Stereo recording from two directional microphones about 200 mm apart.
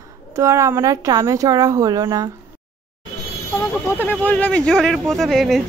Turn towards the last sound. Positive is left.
turn(degrees=0)  # may be behind; listen again after turning